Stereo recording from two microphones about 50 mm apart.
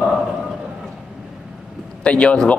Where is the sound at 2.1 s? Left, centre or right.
Left.